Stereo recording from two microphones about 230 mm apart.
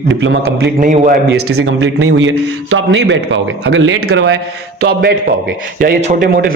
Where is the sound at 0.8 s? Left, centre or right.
Right.